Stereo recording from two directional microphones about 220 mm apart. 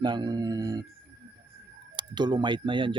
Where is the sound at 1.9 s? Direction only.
20° right (ahead or behind).